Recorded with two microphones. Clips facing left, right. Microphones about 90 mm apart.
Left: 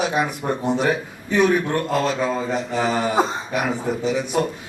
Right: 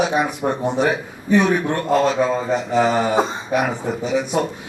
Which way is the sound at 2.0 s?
15° right (ahead or behind).